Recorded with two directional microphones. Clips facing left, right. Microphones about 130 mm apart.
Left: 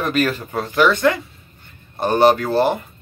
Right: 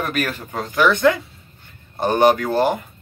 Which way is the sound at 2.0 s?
15° right (ahead or behind).